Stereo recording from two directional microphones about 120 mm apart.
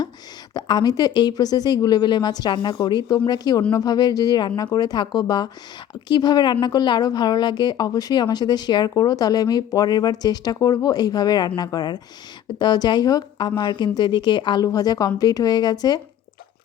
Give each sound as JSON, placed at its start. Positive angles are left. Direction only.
{"t": 0.5, "sound": "a woman's voice", "side_deg": 35}